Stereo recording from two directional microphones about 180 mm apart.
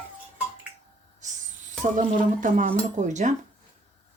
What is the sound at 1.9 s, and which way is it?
Speech, 45° right (ahead or behind).